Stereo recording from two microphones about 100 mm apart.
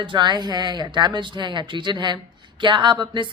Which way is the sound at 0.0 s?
50° right (ahead or behind).